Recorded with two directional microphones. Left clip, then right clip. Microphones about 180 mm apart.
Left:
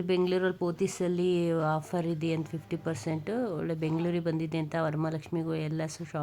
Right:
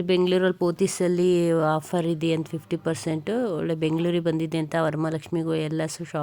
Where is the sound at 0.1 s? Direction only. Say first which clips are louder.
Right 6 dB; 25° right (ahead or behind).